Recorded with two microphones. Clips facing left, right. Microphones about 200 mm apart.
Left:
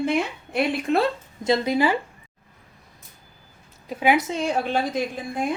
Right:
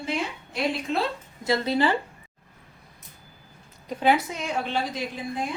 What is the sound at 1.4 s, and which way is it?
Speech, 20° left (ahead or behind).